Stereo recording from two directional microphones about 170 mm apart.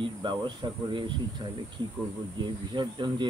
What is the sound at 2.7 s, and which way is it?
Speech, 25° right (ahead or behind).